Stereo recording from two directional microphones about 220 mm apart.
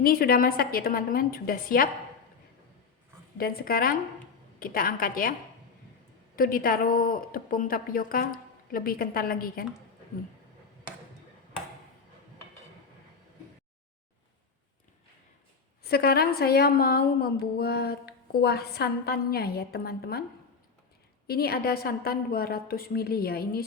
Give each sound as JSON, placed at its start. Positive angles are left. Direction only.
{"t": 0.0, "sound": "speech", "side_deg": 40}
{"t": 3.3, "sound": "a woman's voice", "side_deg": 40}
{"t": 6.3, "sound": "speech", "side_deg": 40}
{"t": 15.8, "sound": "a woman's voice", "side_deg": 45}
{"t": 21.2, "sound": "a woman's voice", "side_deg": 45}